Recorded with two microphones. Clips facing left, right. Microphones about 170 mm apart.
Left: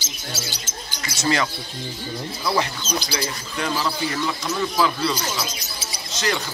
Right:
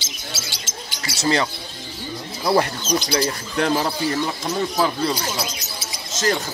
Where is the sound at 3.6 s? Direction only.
55° right (ahead or behind).